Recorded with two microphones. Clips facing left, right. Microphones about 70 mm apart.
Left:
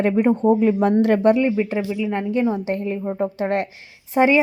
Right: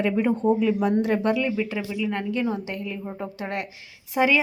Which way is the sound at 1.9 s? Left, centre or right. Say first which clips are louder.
Left 4 dB; centre.